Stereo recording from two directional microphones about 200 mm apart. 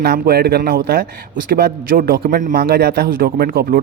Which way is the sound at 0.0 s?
55° right (ahead or behind).